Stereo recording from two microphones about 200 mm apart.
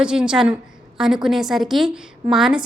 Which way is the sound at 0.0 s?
5° right (ahead or behind).